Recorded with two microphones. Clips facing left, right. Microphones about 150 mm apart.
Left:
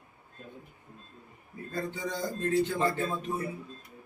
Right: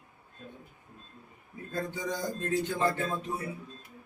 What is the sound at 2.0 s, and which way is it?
Speech, 15° right (ahead or behind).